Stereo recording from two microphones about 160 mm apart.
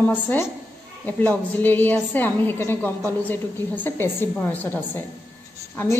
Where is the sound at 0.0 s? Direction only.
15° left (ahead or behind).